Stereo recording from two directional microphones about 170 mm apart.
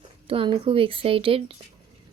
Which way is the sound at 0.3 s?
30° right (ahead or behind).